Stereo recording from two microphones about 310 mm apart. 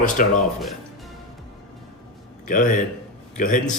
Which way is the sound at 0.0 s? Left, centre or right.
Left.